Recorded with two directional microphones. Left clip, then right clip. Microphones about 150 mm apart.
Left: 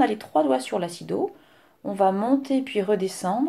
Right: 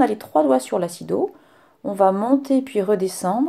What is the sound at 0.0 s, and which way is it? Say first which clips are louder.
Speech: right 4 dB; 40° right (ahead or behind).